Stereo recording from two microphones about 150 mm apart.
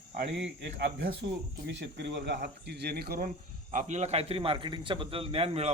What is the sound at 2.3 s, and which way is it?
Speech, 90° right.